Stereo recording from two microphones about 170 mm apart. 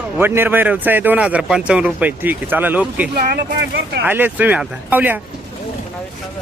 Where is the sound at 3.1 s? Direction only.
65° right (ahead or behind).